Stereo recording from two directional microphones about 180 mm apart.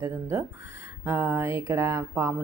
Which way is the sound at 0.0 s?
15° right (ahead or behind).